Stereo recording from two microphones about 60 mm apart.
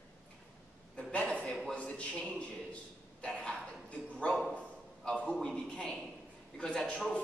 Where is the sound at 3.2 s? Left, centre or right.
Centre.